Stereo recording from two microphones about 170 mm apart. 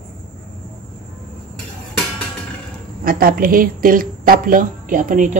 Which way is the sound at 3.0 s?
60° right (ahead or behind).